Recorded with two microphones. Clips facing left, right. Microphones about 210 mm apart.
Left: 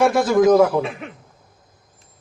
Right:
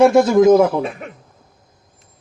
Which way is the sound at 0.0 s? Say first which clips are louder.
Right 4 dB; 20° right (ahead or behind).